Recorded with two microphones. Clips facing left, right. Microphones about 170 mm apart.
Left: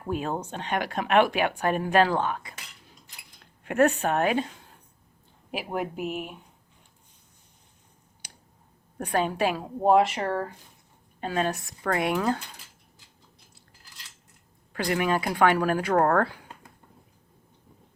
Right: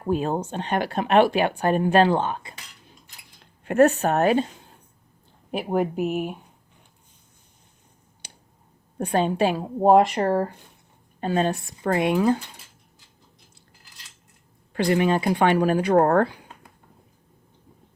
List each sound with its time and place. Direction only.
0.1 s speech: 35° right (ahead or behind)
3.6 s speech: 35° right (ahead or behind)
5.7 s speech: 45° right (ahead or behind)
8.2 s a sound: 25° right (ahead or behind)
9.0 s speech: 25° right (ahead or behind); by 10.5 s 40° right (ahead or behind)
11.2 s speech: 30° right (ahead or behind)
14.7 s speech: 25° right (ahead or behind)